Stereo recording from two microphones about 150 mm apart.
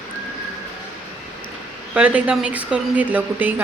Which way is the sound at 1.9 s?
10° right (ahead or behind).